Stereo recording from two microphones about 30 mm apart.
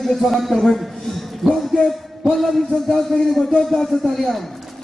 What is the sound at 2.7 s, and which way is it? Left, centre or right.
A man's voice, left.